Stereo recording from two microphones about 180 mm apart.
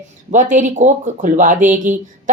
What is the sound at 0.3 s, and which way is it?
Speech, 45° right (ahead or behind).